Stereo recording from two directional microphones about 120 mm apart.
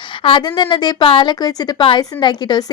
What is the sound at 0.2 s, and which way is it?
A woman's voice, 45° left (ahead or behind).